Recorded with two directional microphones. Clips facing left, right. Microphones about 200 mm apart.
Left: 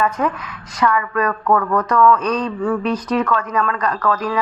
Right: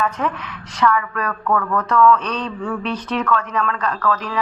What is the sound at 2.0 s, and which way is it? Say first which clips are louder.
Speech: left 1 dB; 40° left (ahead or behind).